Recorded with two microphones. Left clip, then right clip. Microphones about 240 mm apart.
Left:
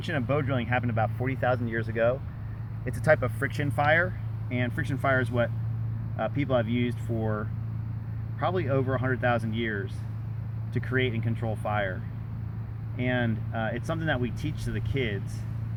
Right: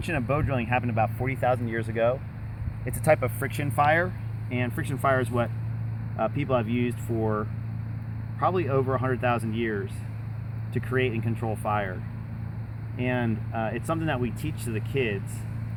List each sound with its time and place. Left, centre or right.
0.1 s speech: right
13.1 s speech: centre